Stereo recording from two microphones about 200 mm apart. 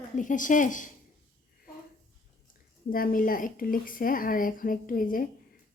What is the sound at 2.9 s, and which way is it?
A woman's voice, 45° left (ahead or behind).